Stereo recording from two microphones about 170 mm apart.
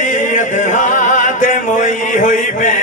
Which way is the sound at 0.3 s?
50° left (ahead or behind).